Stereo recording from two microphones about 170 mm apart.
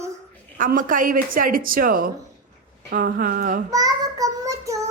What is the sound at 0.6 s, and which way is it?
A woman's voice, 50° right (ahead or behind).